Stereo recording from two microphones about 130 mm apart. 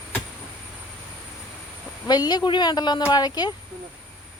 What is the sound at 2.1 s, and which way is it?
A woman's voice, 30° left (ahead or behind).